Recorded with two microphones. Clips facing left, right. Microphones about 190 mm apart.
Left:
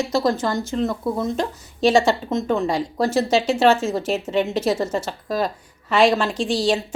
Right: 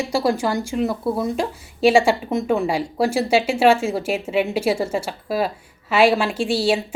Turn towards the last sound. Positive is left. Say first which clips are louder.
# right 1 dB
turn(degrees=-10)  # may be behind; listen again after turning